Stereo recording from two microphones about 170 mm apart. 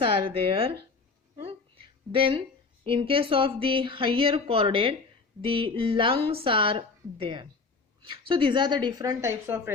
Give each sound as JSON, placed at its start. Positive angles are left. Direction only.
{"t": 0.0, "sound": "speech", "side_deg": -30}
{"t": 1.5, "sound": "a sound", "side_deg": -35}
{"t": 2.8, "sound": "a woman's voice", "side_deg": -30}